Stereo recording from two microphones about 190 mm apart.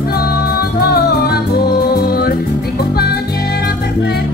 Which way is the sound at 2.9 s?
55° left (ahead or behind).